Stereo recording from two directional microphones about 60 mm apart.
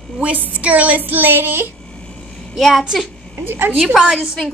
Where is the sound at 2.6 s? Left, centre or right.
Centre.